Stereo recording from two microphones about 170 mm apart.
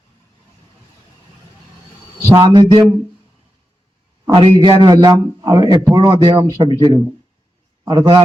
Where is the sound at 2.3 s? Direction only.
20° right (ahead or behind).